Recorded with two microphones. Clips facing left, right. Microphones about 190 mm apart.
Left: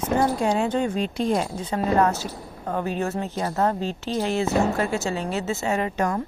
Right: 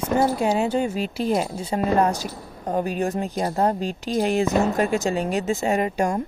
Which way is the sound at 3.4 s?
30° right (ahead or behind).